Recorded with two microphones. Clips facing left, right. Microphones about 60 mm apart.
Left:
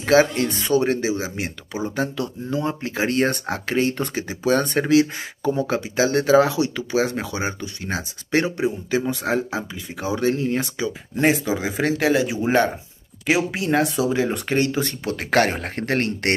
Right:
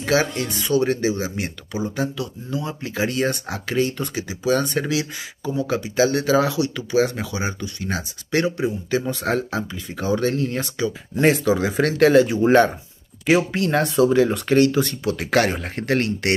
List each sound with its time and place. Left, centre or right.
0.1 s speech: left
2.0 s speech: left; by 14.3 s centre
14.3 s speech: left